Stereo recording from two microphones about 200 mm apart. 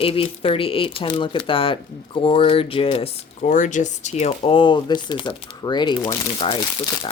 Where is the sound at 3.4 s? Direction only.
40° left (ahead or behind); by 6.6 s 25° left (ahead or behind).